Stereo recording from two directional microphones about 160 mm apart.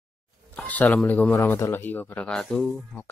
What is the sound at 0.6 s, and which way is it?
Speech, 10° left (ahead or behind).